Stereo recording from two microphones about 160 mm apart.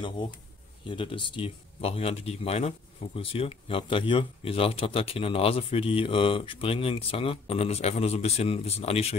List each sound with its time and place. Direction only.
0.8 s speech: 30° left (ahead or behind)